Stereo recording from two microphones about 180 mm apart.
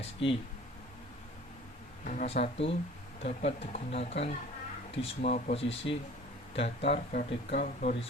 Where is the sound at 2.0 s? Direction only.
45° left (ahead or behind).